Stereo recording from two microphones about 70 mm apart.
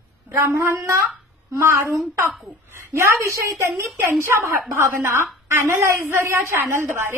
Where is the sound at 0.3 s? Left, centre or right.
Right.